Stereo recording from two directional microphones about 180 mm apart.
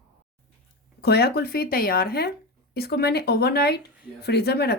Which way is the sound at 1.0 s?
60° left (ahead or behind).